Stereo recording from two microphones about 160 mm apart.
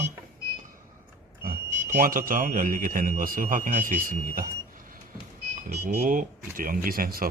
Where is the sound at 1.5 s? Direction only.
60° right (ahead or behind).